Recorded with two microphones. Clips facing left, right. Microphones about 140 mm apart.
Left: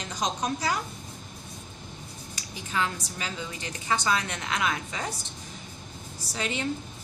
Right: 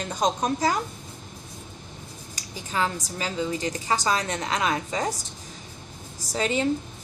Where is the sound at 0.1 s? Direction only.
50° right (ahead or behind).